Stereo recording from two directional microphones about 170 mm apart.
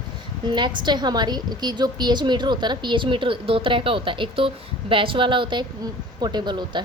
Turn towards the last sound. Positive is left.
turn(degrees=-25)  # may be behind; listen again after turning